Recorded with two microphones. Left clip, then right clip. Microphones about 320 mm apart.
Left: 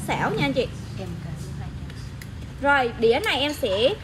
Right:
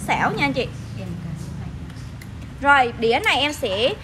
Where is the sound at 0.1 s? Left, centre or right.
Right.